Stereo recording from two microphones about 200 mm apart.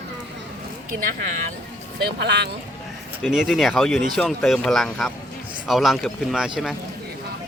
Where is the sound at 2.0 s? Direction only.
55° right (ahead or behind).